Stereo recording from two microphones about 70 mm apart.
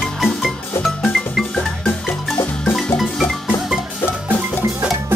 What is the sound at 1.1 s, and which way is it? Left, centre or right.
Music, centre.